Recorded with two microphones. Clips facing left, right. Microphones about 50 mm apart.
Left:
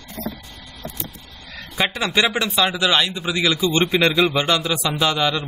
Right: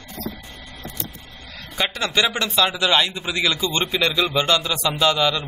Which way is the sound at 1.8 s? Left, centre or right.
Centre.